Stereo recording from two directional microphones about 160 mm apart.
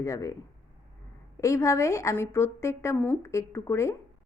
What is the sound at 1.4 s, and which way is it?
A woman's voice, 20° left (ahead or behind).